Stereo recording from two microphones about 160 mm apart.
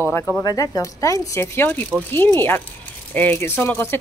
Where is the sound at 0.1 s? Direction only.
15° left (ahead or behind).